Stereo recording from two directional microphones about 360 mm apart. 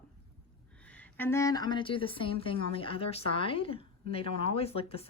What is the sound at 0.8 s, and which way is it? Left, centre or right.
A woman's voice, centre.